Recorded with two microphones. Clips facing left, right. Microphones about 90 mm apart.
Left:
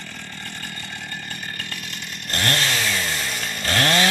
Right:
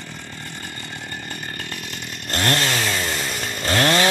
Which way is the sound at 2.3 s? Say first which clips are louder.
Right 3 dB; 30° right (ahead or behind).